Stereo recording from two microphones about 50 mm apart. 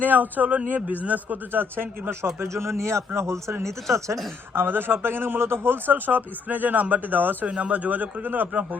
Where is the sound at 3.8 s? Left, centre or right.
Right.